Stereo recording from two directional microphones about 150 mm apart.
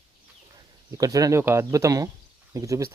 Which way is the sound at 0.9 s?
25° right (ahead or behind).